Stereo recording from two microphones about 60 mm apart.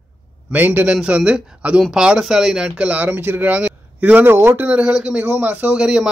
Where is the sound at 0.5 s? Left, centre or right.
Right.